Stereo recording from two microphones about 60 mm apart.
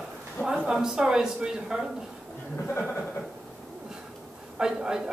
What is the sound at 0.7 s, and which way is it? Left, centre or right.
Speech, centre.